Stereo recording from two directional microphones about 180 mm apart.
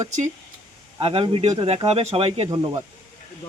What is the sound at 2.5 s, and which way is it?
Speech, 20° right (ahead or behind).